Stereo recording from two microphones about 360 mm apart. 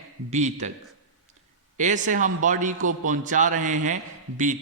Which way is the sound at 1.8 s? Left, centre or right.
Right.